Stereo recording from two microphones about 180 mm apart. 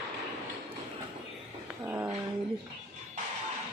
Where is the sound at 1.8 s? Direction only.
10° right (ahead or behind).